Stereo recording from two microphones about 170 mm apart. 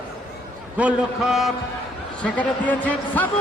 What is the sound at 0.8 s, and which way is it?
A man's voice, 5° right (ahead or behind).